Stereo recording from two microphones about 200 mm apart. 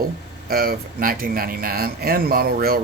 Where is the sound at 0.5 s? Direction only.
50° right (ahead or behind).